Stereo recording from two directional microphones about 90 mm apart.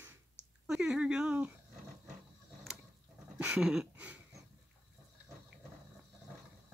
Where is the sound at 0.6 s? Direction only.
10° right (ahead or behind).